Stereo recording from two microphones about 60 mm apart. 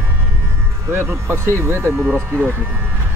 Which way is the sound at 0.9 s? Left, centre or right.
Right.